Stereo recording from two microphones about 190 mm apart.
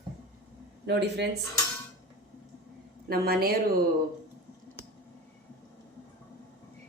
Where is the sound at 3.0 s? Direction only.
55° right (ahead or behind).